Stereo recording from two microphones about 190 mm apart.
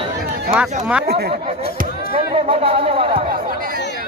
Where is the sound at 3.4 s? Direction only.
50° right (ahead or behind).